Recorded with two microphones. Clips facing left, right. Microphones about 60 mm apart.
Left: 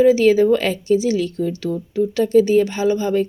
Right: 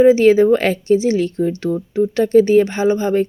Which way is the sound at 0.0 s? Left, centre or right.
Right.